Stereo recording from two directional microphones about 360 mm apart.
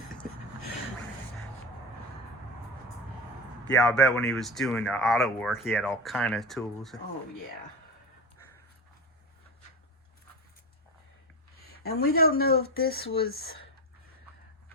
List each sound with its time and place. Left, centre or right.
3.7 s speech: centre
11.8 s speech: left